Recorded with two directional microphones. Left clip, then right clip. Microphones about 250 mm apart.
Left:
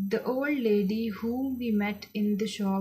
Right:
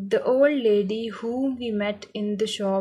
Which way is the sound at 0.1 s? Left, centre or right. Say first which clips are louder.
Right 10 dB; centre.